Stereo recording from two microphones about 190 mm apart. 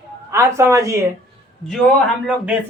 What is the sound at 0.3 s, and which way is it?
Speech, 15° right (ahead or behind).